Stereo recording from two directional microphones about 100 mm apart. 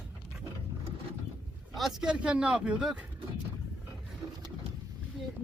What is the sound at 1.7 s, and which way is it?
Speech, centre (ahead or behind).